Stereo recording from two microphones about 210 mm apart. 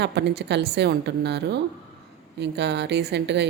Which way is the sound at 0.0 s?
55° right (ahead or behind).